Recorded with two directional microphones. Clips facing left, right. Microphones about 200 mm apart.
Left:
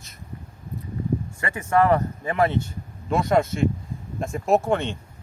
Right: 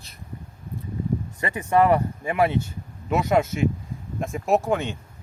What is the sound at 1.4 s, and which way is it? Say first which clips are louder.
Speech: right 1 dB; 20° right (ahead or behind).